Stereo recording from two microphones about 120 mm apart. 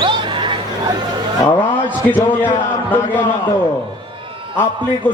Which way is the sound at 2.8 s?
15° left (ahead or behind).